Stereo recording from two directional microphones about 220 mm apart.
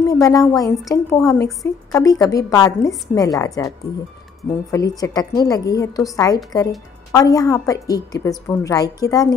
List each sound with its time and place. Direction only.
0.0 s a woman's voice: 15° left (ahead or behind)